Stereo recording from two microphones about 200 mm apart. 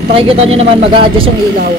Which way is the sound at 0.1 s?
30° right (ahead or behind).